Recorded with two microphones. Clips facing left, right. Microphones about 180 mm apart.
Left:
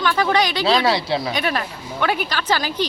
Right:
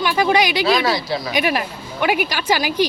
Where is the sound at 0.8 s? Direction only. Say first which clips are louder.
Left 1 dB; 30° left (ahead or behind).